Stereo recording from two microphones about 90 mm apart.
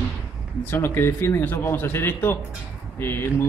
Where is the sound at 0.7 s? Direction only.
25° left (ahead or behind).